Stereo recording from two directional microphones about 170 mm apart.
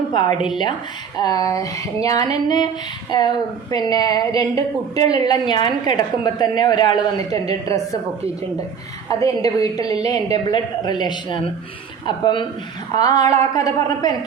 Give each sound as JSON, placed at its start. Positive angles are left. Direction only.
{"t": 1.1, "sound": "a woman's voice", "side_deg": 25}
{"t": 9.0, "sound": "a woman's voice", "side_deg": 20}